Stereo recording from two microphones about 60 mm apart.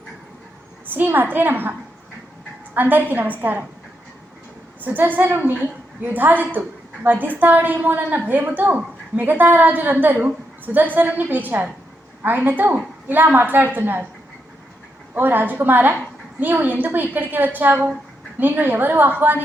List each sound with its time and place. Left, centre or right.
0.9 s a woman's voice: right
2.7 s a woman's voice: right
4.8 s a woman's voice: right
15.1 s a woman's voice: right